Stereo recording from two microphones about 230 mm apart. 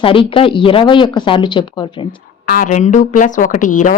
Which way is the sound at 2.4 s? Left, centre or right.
Left.